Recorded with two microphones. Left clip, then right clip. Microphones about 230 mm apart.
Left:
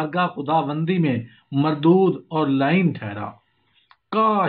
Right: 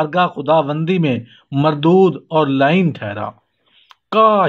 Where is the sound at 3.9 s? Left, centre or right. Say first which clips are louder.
Right 8 dB; right.